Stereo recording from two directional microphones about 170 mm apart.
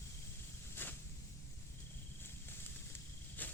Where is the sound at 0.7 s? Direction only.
10° left (ahead or behind).